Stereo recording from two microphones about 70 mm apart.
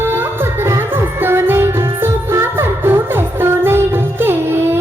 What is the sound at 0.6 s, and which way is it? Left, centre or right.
Music, right.